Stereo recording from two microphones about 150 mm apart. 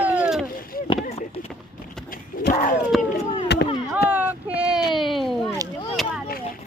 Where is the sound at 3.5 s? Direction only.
90° left.